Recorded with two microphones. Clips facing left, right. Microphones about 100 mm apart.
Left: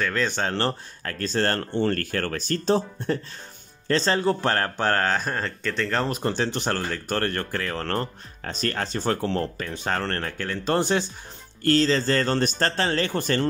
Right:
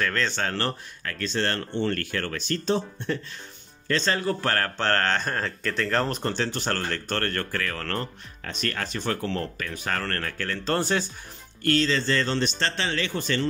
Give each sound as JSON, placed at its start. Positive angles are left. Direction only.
{"t": 0.0, "sound": "speech", "side_deg": 10}
{"t": 6.2, "sound": "speech", "side_deg": 15}
{"t": 11.6, "sound": "speech", "side_deg": 35}